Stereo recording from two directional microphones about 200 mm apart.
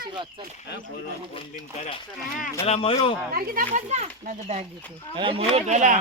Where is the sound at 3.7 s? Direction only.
35° right (ahead or behind).